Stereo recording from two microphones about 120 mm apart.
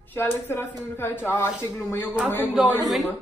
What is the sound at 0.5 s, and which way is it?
Speech, 20° left (ahead or behind).